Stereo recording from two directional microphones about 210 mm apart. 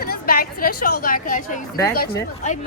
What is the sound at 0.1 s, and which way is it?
A woman's voice, 45° left (ahead or behind).